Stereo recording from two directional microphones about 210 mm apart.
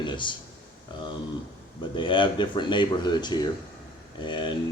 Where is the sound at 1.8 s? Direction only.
20° left (ahead or behind).